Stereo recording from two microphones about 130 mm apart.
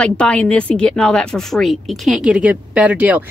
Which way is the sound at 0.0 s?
10° left (ahead or behind).